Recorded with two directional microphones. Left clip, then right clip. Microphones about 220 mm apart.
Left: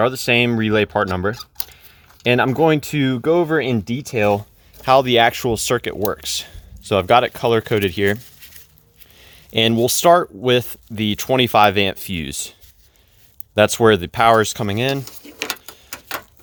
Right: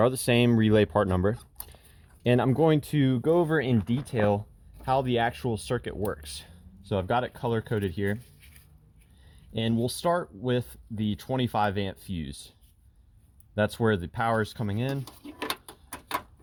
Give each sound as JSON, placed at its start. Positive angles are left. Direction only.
{"t": 0.0, "sound": "speech", "side_deg": 5}
{"t": 9.3, "sound": "speech", "side_deg": 30}
{"t": 13.6, "sound": "speech", "side_deg": 35}